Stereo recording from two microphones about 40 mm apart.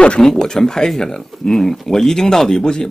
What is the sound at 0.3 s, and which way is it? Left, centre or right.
Speech, centre.